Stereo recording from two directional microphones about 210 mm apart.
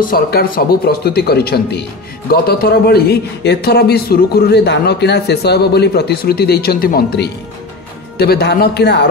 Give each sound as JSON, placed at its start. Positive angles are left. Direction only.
{"t": 0.0, "sound": "a man's voice", "side_deg": 45}